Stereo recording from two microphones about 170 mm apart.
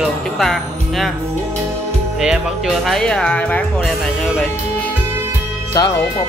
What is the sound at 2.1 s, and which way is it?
Speech, centre (ahead or behind).